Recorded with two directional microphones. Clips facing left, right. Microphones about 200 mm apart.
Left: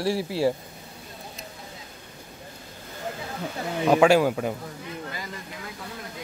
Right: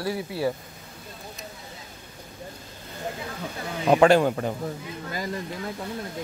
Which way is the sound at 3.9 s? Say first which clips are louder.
Right 1 dB; 5° left (ahead or behind).